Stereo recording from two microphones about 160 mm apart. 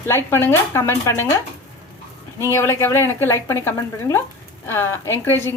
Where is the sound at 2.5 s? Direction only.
15° left (ahead or behind).